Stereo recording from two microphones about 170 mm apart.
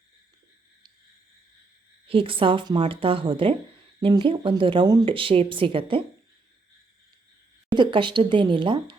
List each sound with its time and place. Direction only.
2.0 s a woman's voice: 30° right (ahead or behind)
7.7 s speech: 30° right (ahead or behind)